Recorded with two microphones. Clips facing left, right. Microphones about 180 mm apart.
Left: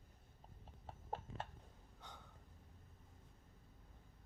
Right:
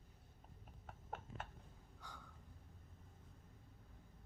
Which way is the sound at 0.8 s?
30° left (ahead or behind).